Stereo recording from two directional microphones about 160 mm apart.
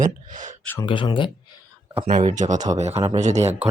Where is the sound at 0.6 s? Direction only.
10° left (ahead or behind).